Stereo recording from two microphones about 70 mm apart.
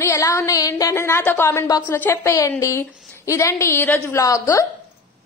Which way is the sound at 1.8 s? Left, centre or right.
Left.